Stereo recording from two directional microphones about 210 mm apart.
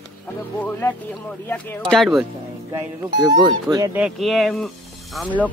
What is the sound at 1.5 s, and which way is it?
Speech, 10° left (ahead or behind).